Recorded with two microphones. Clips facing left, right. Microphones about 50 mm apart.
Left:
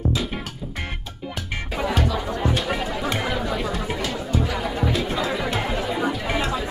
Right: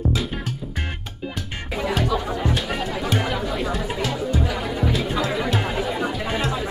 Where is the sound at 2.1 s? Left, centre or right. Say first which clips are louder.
Even; centre.